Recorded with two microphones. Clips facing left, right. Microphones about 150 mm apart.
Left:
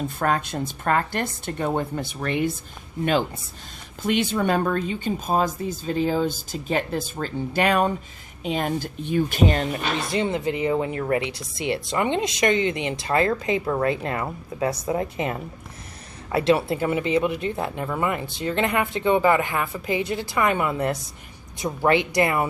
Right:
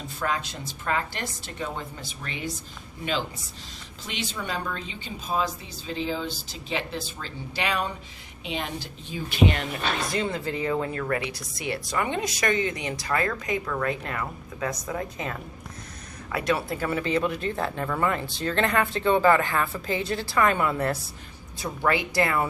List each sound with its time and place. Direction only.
0.2 s speech: 50° left (ahead or behind)
9.4 s speech: 40° left (ahead or behind)
10.1 s speech: 20° left (ahead or behind)